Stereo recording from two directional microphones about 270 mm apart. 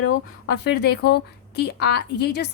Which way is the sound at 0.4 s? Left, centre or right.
Left.